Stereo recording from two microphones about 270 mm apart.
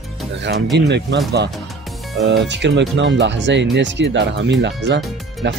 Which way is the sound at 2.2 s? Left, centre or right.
Right.